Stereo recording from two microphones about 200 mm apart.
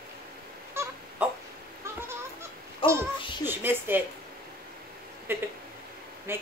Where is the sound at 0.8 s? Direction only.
10° right (ahead or behind).